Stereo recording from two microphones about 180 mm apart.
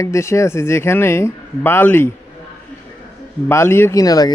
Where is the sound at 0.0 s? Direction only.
15° left (ahead or behind).